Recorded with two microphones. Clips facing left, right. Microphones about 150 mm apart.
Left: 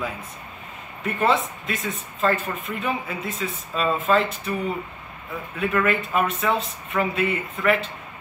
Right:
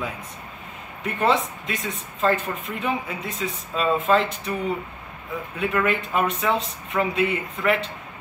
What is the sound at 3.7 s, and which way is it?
Speech, 20° right (ahead or behind).